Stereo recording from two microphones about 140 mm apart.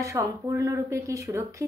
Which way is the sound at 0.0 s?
20° right (ahead or behind).